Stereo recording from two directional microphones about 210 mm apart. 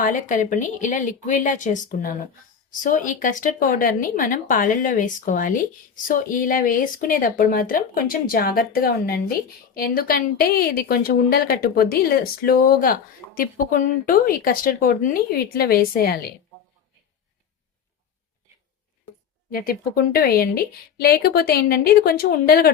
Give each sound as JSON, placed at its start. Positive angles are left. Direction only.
{"t": 0.0, "sound": "a woman's voice", "side_deg": 40}
{"t": 19.5, "sound": "a woman's voice", "side_deg": 45}